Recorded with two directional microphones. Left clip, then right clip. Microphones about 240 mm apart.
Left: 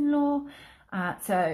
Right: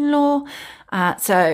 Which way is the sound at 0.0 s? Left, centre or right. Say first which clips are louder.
Right 8 dB; right.